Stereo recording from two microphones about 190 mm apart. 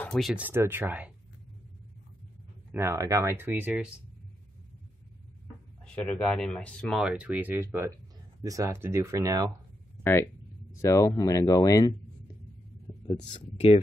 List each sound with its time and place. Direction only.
0.0 s speech: centre (ahead or behind)
2.7 s speech: 15° right (ahead or behind)
5.9 s speech: 5° left (ahead or behind); by 9.5 s 20° right (ahead or behind)
10.0 s speech: 15° left (ahead or behind)
13.2 s speech: 40° left (ahead or behind)